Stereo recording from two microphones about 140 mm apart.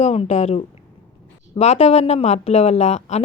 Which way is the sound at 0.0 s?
50° left (ahead or behind).